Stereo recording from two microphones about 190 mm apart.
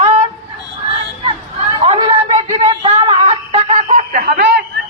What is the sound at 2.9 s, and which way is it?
Music, 30° right (ahead or behind).